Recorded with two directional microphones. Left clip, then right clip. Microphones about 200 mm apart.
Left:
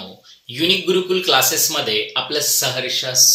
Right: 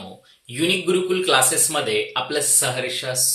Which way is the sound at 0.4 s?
15° right (ahead or behind).